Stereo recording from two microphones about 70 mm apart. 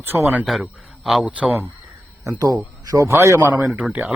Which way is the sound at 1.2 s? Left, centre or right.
Centre.